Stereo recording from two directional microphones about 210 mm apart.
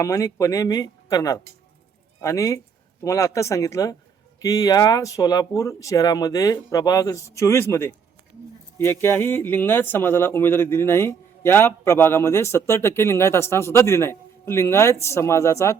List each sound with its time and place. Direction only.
0.0 s speech: 15° left (ahead or behind)